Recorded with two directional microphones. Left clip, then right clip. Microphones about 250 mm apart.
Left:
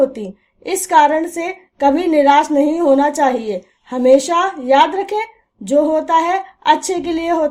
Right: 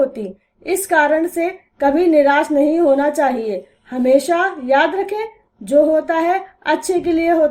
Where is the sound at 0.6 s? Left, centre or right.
Left.